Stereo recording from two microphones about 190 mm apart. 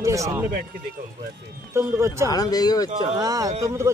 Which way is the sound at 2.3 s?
20° left (ahead or behind).